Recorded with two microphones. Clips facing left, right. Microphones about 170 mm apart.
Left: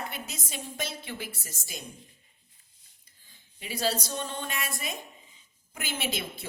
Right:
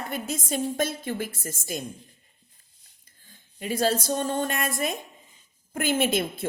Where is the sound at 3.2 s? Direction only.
45° right (ahead or behind).